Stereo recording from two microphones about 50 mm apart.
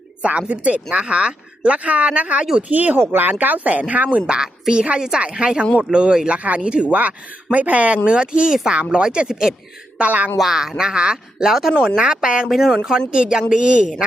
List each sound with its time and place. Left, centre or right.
0.2 s speech: right
3.0 s speech: right
3.2 s speech: right
4.3 s speech: centre
10.0 s speech: right
10.3 s speech: centre
12.5 s speech: centre